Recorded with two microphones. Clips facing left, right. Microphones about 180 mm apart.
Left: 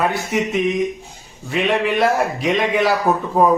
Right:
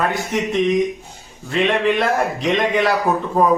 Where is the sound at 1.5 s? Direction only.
5° left (ahead or behind).